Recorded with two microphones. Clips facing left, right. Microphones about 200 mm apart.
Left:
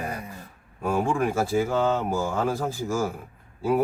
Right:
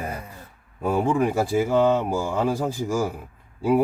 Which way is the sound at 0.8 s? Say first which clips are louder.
Right 3 dB; 15° right (ahead or behind).